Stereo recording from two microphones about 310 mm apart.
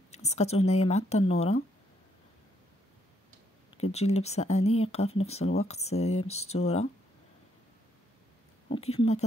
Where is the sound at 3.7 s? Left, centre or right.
Centre.